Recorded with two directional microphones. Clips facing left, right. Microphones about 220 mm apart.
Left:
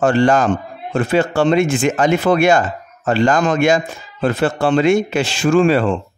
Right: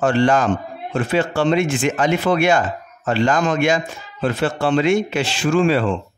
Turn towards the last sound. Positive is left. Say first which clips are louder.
# left 3 dB
turn(degrees=50)  # may be behind; listen again after turning